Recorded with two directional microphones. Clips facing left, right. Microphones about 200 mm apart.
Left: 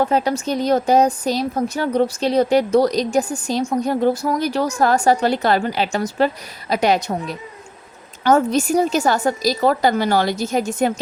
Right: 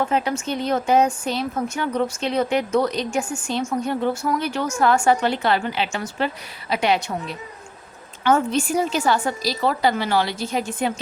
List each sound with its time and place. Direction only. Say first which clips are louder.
0.0 s a woman's voice: left 4 dB; 35° left (ahead or behind)